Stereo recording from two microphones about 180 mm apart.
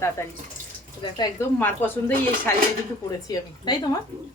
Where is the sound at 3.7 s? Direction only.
25° left (ahead or behind).